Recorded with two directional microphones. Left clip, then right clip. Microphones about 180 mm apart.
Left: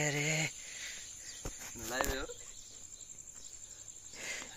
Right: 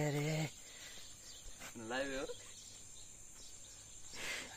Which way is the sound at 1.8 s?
20° left (ahead or behind).